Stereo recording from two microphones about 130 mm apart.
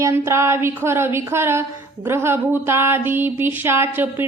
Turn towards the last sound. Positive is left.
turn(degrees=-15)  # may be behind; listen again after turning